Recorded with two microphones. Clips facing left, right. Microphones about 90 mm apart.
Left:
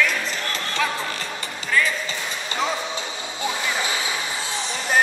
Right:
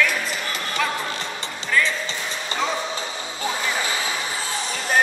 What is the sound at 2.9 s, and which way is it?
Music, 40° right (ahead or behind).